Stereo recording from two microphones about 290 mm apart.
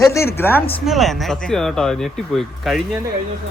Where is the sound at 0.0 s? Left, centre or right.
Centre.